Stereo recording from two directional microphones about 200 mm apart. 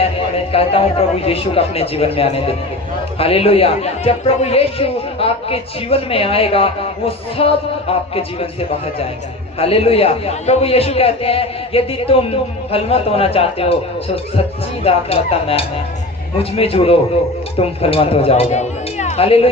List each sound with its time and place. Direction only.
0.5 s speech: 30° left (ahead or behind)
9.6 s speech: 30° left (ahead or behind)
14.8 s speech: 30° left (ahead or behind)